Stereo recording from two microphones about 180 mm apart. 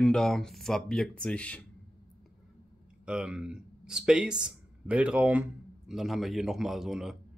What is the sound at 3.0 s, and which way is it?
Speech, 5° right (ahead or behind).